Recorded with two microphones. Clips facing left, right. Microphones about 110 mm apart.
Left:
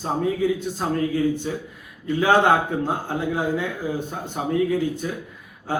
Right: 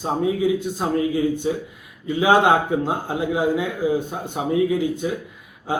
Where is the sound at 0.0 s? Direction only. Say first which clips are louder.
Right 2 dB; 15° right (ahead or behind).